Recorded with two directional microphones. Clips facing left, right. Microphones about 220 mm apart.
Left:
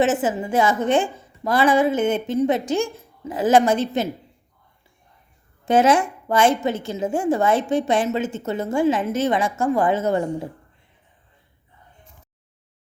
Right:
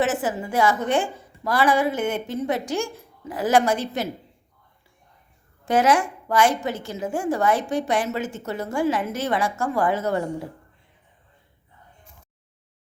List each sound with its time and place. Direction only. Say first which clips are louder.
0.0 s a woman's voice: left 4 dB; 20° left (ahead or behind)
5.6 s a woman's voice: left 3 dB; 25° left (ahead or behind)